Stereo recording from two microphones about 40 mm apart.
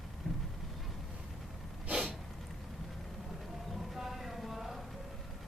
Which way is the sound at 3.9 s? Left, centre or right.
Centre.